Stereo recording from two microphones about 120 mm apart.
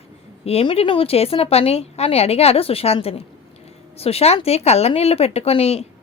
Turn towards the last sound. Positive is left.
turn(degrees=55)  # may be behind; listen again after turning